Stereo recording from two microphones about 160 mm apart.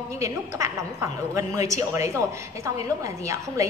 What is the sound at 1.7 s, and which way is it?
A woman's voice, 20° right (ahead or behind).